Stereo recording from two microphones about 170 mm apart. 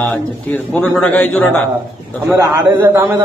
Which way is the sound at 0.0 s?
10° left (ahead or behind).